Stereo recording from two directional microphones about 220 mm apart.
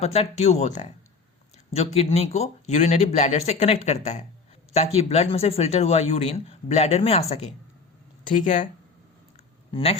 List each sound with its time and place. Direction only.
0.0 s speech: 30° left (ahead or behind)
9.7 s speech: 25° left (ahead or behind)